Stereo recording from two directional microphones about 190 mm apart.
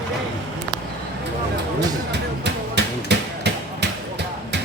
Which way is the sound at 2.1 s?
65° right (ahead or behind).